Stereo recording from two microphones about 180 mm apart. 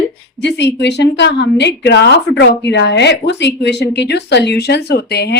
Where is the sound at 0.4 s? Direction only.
75° left (ahead or behind).